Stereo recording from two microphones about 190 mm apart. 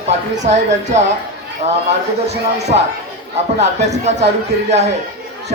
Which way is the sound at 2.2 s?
35° right (ahead or behind).